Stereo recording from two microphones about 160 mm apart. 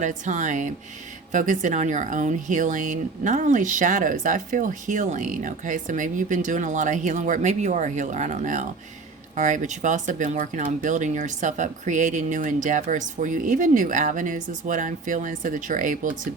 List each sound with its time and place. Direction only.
0.0 s speech: 50° right (ahead or behind)